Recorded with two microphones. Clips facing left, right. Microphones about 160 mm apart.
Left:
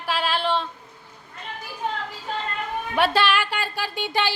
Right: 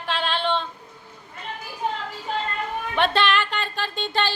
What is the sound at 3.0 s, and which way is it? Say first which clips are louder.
Speech: even; 5° left (ahead or behind).